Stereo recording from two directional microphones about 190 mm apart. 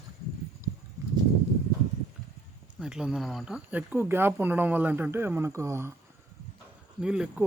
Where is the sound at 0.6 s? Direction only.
15° right (ahead or behind).